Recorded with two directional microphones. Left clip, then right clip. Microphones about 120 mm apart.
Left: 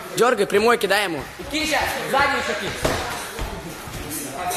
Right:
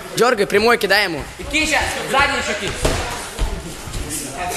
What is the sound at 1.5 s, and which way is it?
Speech, 60° left (ahead or behind).